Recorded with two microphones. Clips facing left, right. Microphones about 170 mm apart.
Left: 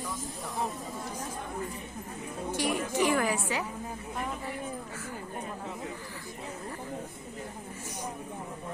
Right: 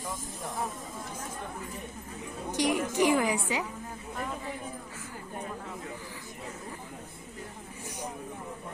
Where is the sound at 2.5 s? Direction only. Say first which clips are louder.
Right 2 dB; 15° right (ahead or behind).